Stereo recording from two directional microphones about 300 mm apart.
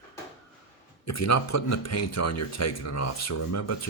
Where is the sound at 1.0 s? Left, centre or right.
Left.